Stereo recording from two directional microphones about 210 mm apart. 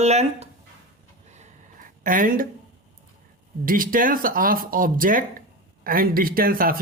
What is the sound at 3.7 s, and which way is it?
Speech, 40° right (ahead or behind).